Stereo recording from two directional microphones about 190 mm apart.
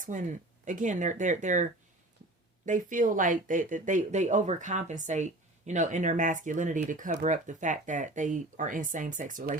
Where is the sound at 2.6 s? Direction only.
45° right (ahead or behind).